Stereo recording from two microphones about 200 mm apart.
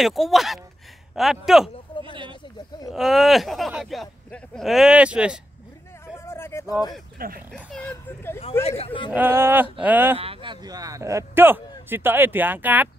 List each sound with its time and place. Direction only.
0.0 s speech: centre (ahead or behind)
2.9 s speech: centre (ahead or behind)
6.1 s a sound: 10° left (ahead or behind)
7.2 s speech: 45° right (ahead or behind)
7.5 s speech: 5° left (ahead or behind)
8.6 s a man's voice: 30° left (ahead or behind)
9.1 s speech: 10° right (ahead or behind)
10.1 s speech: 30° right (ahead or behind); by 12.9 s 10° right (ahead or behind)